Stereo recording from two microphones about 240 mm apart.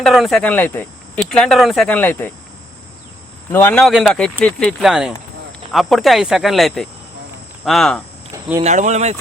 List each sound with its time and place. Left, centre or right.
0.0 s speech: centre
3.5 s speech: centre
8.6 s speech: right